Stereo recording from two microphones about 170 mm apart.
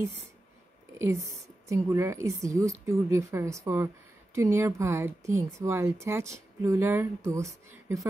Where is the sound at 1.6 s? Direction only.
20° right (ahead or behind).